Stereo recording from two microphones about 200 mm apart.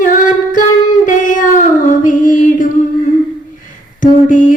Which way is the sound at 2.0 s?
40° left (ahead or behind).